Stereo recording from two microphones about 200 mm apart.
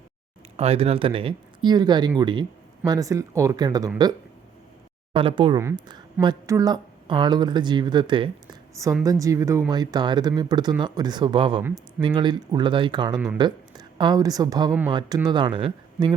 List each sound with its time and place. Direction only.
0.5 s speech: 30° right (ahead or behind)
5.1 s speech: 25° right (ahead or behind)
11.6 s speech: 10° right (ahead or behind)
12.0 s a woman's voice: 25° right (ahead or behind)